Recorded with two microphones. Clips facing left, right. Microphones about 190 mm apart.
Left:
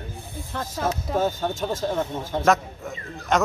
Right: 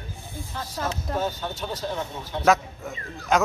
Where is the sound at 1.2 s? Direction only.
45° left (ahead or behind).